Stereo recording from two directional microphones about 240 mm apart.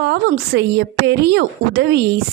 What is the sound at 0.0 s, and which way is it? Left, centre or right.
A woman's voice, right.